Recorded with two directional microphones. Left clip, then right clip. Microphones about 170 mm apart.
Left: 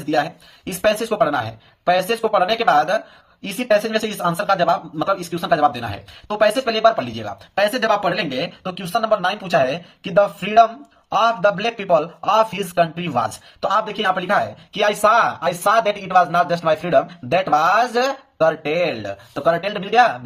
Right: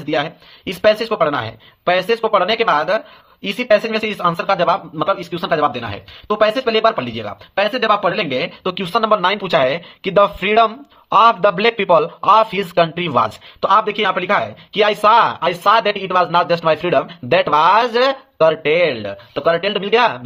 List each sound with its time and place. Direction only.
0.0 s a man's voice: 40° right (ahead or behind)